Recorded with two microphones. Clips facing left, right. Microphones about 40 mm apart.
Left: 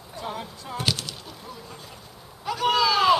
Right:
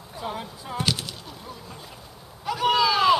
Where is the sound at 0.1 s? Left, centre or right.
Centre.